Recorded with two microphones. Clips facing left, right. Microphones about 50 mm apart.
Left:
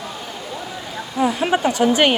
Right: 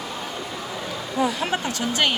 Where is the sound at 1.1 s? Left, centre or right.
Centre.